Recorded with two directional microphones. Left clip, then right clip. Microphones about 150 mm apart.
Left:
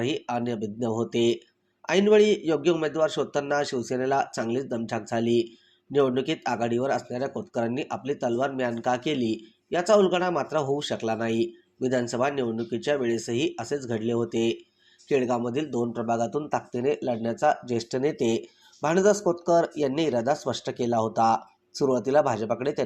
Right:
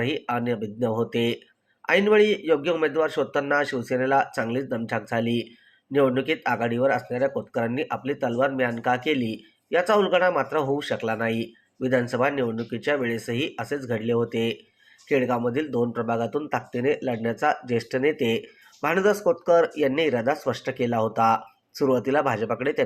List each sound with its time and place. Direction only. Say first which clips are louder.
0.0 s speech: right 2 dB; 40° left (ahead or behind)